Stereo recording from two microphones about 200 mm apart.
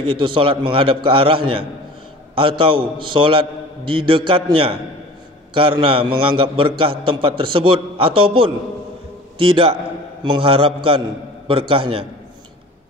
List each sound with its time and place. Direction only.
0.0 s a man's voice: 25° right (ahead or behind)